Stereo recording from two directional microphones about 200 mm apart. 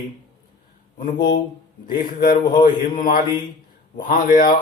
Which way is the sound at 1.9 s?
45° left (ahead or behind).